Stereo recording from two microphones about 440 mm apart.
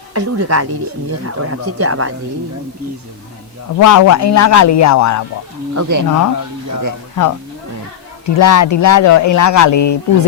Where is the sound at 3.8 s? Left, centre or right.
Left.